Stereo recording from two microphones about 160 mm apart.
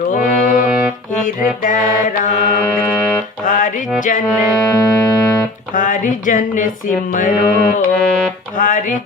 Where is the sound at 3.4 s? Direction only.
55° left (ahead or behind).